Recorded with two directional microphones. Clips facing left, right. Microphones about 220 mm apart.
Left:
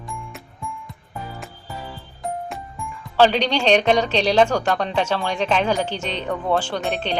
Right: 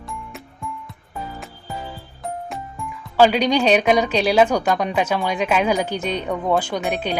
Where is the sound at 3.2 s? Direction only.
10° right (ahead or behind).